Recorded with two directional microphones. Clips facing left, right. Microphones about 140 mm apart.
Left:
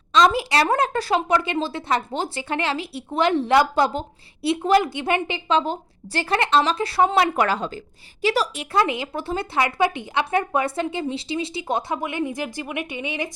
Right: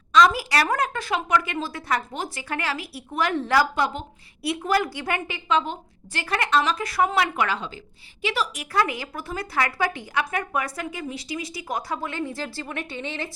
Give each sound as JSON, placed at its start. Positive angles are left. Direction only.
{"t": 0.1, "sound": "speech", "side_deg": 25}
{"t": 3.8, "sound": "a woman's voice", "side_deg": 35}
{"t": 8.7, "sound": "speech", "side_deg": 25}